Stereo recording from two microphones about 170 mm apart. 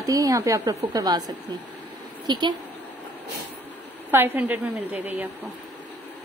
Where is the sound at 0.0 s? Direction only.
20° right (ahead or behind).